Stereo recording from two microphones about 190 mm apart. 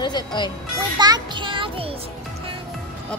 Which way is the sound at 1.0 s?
25° right (ahead or behind).